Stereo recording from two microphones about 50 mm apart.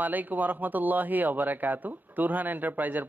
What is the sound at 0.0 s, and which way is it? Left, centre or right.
Speech, right.